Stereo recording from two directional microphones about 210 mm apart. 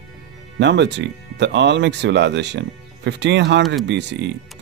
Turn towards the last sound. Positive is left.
turn(degrees=-55)  # may be behind; listen again after turning